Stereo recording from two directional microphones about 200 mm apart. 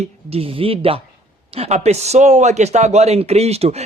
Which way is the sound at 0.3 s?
30° right (ahead or behind).